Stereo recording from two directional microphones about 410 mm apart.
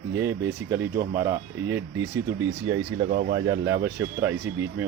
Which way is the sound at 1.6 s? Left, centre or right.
Right.